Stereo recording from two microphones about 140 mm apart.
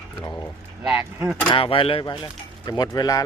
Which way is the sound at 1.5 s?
40° left (ahead or behind).